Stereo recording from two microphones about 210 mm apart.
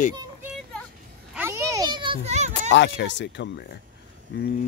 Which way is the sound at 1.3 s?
10° right (ahead or behind).